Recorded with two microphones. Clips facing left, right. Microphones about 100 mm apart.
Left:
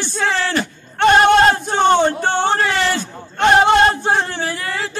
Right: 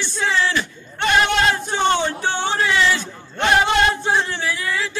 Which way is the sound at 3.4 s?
40° left (ahead or behind).